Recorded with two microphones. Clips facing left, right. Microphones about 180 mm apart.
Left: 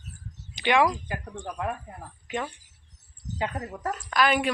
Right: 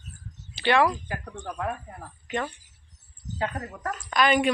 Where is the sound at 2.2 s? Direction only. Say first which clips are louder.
Right 2 dB; 10° left (ahead or behind).